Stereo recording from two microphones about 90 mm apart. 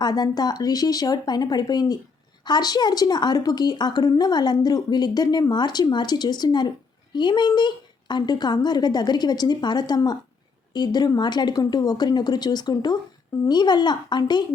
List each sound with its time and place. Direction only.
0.0 s a woman's voice: 50° left (ahead or behind)